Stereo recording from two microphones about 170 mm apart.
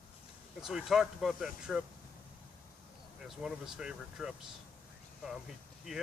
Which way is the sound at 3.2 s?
5° right (ahead or behind).